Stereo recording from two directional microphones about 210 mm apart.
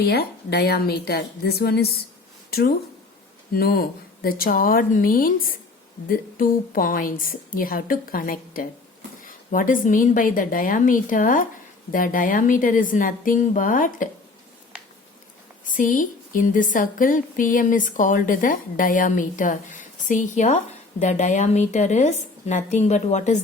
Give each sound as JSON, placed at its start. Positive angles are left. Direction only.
{"t": 0.0, "sound": "a woman's voice", "side_deg": 50}
{"t": 15.6, "sound": "a woman's voice", "side_deg": 40}